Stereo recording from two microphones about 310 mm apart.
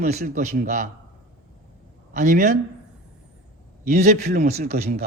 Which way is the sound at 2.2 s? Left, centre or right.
Right.